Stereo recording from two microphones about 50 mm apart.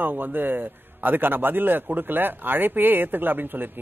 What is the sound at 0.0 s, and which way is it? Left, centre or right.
A man's voice, right.